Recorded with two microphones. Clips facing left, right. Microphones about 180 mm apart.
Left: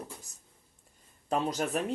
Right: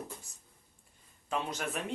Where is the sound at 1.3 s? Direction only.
40° left (ahead or behind).